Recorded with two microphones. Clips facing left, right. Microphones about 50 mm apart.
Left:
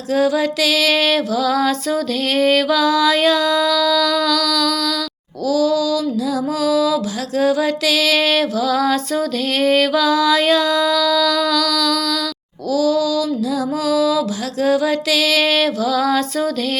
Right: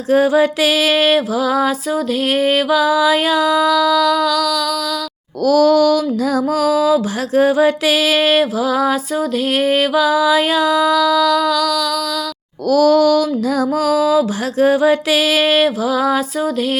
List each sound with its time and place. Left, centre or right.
0.1 s music: right; by 4.7 s centre
5.5 s music: right; by 11.9 s centre
12.7 s music: right; by 16.5 s centre